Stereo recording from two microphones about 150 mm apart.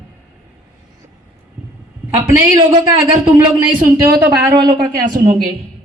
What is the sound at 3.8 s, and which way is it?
A woman's voice, 20° right (ahead or behind).